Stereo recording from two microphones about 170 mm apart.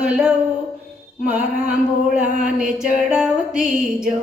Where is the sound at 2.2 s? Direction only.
45° right (ahead or behind).